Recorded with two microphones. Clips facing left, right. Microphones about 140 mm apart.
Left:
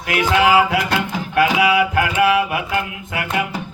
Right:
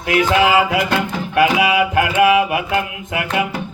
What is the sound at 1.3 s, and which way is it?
Mantra, 20° right (ahead or behind).